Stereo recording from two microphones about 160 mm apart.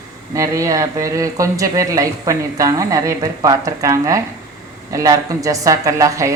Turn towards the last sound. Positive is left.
turn(degrees=-20)  # may be behind; listen again after turning